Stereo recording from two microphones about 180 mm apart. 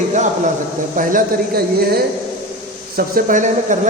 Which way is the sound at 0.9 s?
55° right (ahead or behind).